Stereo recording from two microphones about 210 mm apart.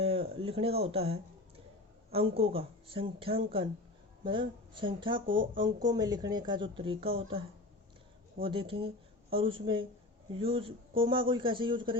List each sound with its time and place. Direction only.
0.0 s speech: 25° right (ahead or behind)
2.3 s speech: 25° right (ahead or behind)
8.4 s speech: 25° right (ahead or behind)